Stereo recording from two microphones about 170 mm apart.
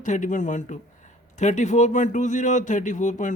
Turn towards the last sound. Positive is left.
turn(degrees=45)  # may be behind; listen again after turning